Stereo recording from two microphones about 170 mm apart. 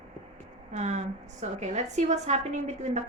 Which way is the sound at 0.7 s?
45° right (ahead or behind).